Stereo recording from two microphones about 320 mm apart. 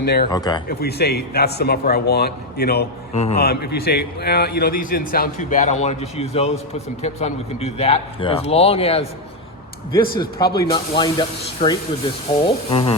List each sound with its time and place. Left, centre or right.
0.0 s speech: left
0.3 s speech: centre
0.7 s a man's voice: left